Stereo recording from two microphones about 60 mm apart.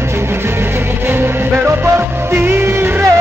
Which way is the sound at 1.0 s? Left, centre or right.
Right.